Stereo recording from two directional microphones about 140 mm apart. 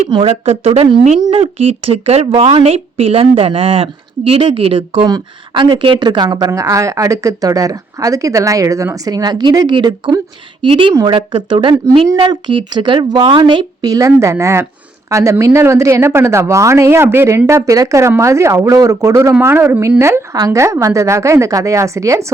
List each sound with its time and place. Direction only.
0.1 s a woman's voice: 40° right (ahead or behind)
5.0 s a woman's voice: 30° right (ahead or behind)